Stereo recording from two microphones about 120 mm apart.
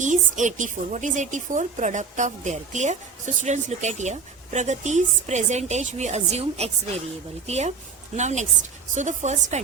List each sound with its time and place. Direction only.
0.0 s a woman's voice: 90° right; by 7.7 s 65° right (ahead or behind)
8.1 s a woman's voice: 75° right (ahead or behind)